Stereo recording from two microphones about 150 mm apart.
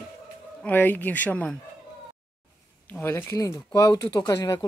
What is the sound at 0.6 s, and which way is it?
Speech, 10° left (ahead or behind).